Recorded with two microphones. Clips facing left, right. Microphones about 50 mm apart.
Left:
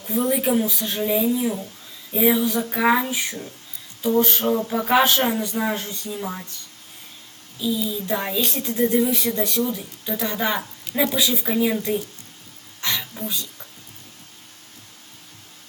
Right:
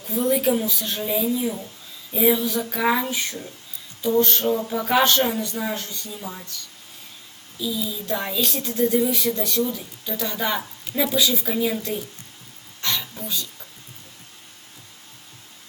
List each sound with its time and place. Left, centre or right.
0.0 s a woman's voice: centre; by 6.6 s left
7.6 s a woman's voice: centre
12.8 s a sound: centre